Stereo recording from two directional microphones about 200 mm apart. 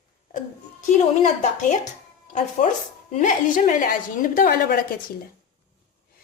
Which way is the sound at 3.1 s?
40° left (ahead or behind).